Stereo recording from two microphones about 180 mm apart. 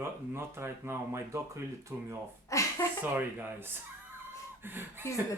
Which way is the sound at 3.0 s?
10° right (ahead or behind).